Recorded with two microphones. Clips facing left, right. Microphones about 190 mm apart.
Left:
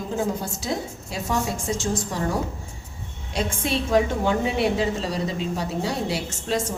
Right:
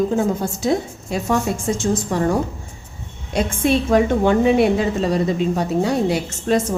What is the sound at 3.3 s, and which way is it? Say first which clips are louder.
A woman's voice: right 7 dB; 55° right (ahead or behind).